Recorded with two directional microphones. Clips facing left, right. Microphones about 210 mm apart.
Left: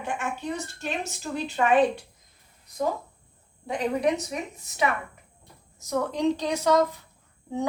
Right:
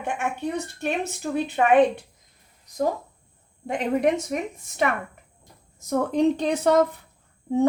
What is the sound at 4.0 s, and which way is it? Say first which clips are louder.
Speech: right 3 dB; 50° right (ahead or behind).